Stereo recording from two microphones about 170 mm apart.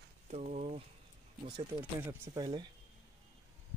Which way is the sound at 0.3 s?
45° right (ahead or behind).